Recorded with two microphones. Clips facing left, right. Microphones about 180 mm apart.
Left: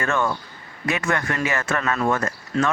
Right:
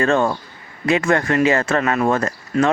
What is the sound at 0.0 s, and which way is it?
A man's voice, 35° right (ahead or behind).